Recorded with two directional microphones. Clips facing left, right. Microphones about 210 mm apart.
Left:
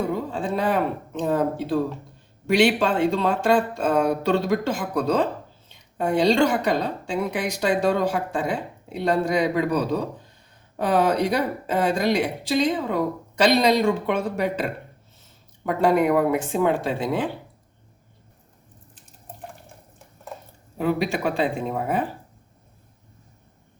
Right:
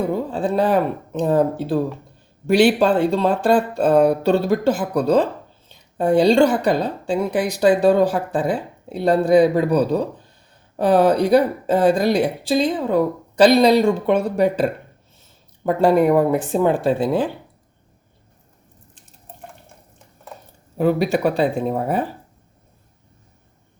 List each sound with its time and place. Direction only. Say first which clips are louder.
0.3 s a woman's voice: right 5 dB; 35° right (ahead or behind)
10.8 s a woman's voice: right 5 dB; 35° right (ahead or behind)
20.7 s a woman's voice: right 6 dB; 40° right (ahead or behind)